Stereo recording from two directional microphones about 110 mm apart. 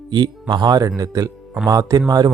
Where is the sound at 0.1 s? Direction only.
40° right (ahead or behind).